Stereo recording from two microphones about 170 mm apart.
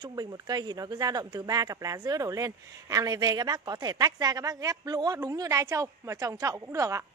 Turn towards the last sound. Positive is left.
turn(degrees=-20)  # may be behind; listen again after turning